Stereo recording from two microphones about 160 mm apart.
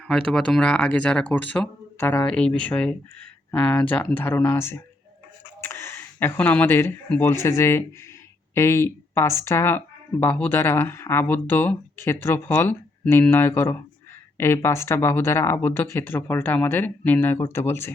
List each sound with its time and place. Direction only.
0.1 s speech: centre (ahead or behind)